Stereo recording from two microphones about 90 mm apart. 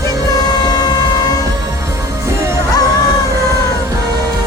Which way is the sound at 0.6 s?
50° left (ahead or behind).